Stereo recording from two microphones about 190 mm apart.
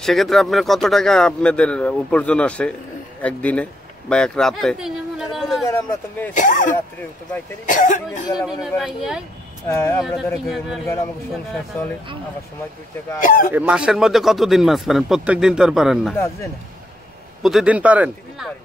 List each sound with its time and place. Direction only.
0.0 s a man's voice: centre (ahead or behind)
5.7 s speech: 15° left (ahead or behind)
6.3 s speech: 40° left (ahead or behind)
8.4 s a man's voice: centre (ahead or behind)
9.7 s speech: 15° left (ahead or behind)
10.0 s a man's voice: centre (ahead or behind)
13.2 s speech: 45° left (ahead or behind)
13.5 s a man's voice: 5° right (ahead or behind)
17.4 s a man's voice: centre (ahead or behind)